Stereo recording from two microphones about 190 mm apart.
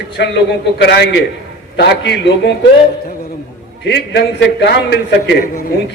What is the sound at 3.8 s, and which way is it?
A man's voice, 65° left (ahead or behind).